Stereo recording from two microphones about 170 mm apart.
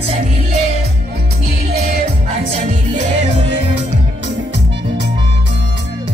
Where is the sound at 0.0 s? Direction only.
35° right (ahead or behind).